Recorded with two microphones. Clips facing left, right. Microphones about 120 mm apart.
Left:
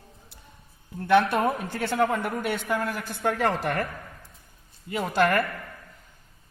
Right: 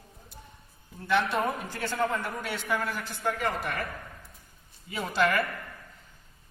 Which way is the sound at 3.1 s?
65° left (ahead or behind).